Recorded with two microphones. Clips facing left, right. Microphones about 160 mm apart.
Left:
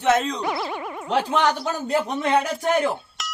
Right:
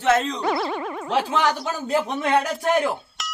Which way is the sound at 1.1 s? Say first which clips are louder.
Left 1 dB; 5° right (ahead or behind).